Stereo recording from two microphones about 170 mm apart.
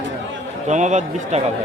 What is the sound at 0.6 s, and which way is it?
Speech, 45° right (ahead or behind).